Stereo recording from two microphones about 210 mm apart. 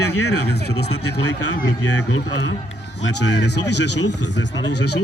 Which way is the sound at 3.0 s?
55° left (ahead or behind).